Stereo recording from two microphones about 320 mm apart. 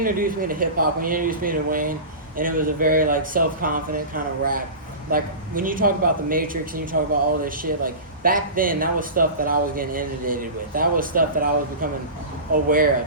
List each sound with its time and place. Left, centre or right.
0.0 s speech: right